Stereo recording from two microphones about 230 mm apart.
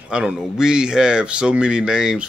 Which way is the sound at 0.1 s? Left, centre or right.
Centre.